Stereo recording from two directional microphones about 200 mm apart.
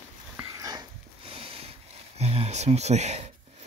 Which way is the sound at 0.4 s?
15° right (ahead or behind).